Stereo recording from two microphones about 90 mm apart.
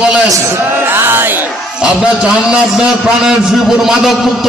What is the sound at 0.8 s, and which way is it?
Music, 25° right (ahead or behind).